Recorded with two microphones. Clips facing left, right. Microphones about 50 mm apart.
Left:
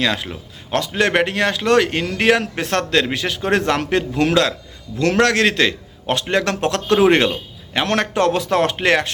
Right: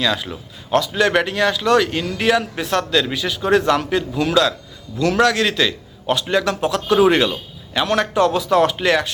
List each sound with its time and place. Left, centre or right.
0.0 s speech: left
7.0 s speech: left